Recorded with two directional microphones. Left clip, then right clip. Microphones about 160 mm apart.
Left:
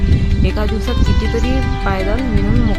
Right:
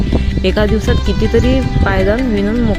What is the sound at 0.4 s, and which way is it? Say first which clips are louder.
Speech: right 8 dB; 30° right (ahead or behind).